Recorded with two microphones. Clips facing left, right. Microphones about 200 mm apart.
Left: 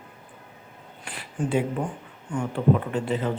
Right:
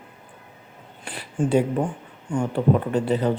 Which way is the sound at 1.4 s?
30° right (ahead or behind).